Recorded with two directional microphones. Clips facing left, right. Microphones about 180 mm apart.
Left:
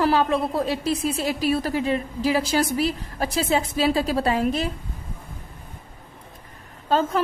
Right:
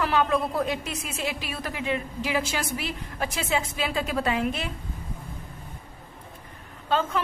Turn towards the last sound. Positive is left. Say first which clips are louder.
# left 4 dB
turn(degrees=40)  # may be behind; listen again after turning